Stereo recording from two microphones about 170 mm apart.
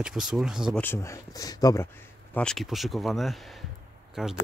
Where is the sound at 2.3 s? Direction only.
5° left (ahead or behind).